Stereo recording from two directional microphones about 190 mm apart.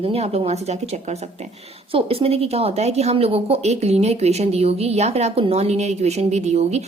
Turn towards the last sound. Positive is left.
turn(degrees=-35)  # may be behind; listen again after turning